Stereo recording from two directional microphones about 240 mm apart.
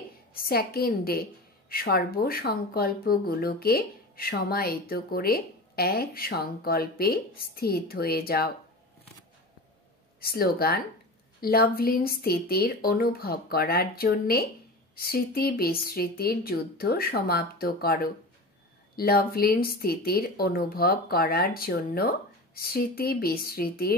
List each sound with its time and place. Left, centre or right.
0.3 s speech: left
10.2 s speech: left